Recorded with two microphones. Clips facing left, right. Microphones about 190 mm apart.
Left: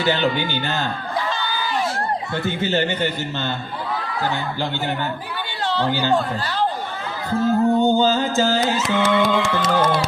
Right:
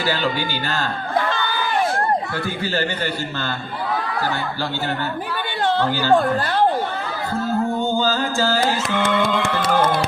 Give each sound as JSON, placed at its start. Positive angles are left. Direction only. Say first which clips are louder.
{"t": 0.0, "sound": "music", "louder": "left 2 dB", "side_deg": 20}
{"t": 1.2, "sound": "crowd", "louder": "right 2 dB", "side_deg": -55}
{"t": 2.4, "sound": "music", "louder": "left 2 dB", "side_deg": 20}
{"t": 5.8, "sound": "speech", "louder": "right 1 dB", "side_deg": 15}
{"t": 7.3, "sound": "music", "louder": "left 5 dB", "side_deg": 20}
{"t": 8.8, "sound": "music", "louder": "left 2 dB", "side_deg": -50}